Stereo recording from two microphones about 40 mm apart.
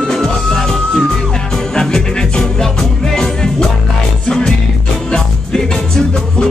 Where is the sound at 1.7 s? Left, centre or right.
Centre.